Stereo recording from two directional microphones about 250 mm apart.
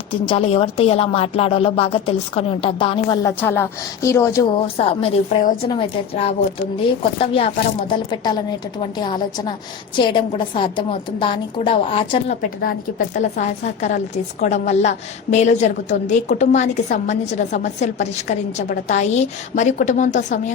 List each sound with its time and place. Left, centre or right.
0.1 s a woman's voice: left